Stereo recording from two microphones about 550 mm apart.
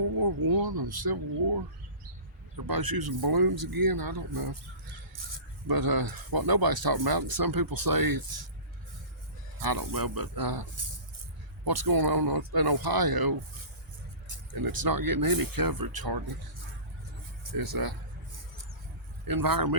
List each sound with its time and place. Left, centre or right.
0.2 s speech: right
2.6 s speech: right
5.6 s speech: right
9.6 s speech: right
17.5 s speech: right
19.3 s speech: right